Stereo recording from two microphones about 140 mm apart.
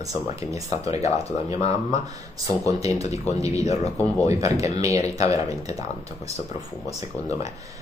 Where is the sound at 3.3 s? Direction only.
50° left (ahead or behind).